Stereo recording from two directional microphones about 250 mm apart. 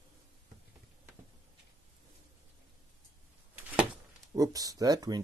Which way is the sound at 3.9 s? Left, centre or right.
Centre.